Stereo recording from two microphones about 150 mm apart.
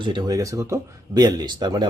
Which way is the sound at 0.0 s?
30° right (ahead or behind).